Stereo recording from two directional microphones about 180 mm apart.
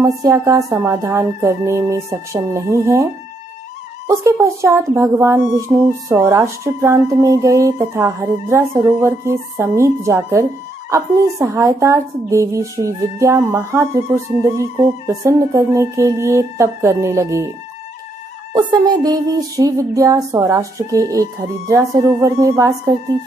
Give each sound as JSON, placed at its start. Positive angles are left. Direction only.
{"t": 0.0, "sound": "speech", "side_deg": -20}
{"t": 4.1, "sound": "speech", "side_deg": -15}
{"t": 18.5, "sound": "a sound", "side_deg": -25}